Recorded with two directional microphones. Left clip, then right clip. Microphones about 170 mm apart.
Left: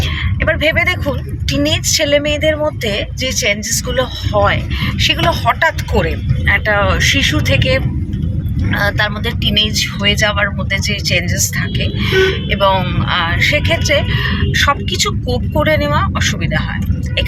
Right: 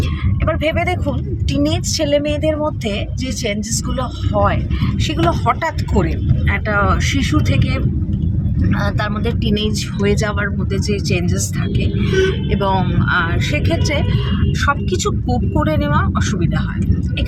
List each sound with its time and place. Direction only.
0.4 s speech: 5° right (ahead or behind)
12.5 s speech: 5° right (ahead or behind)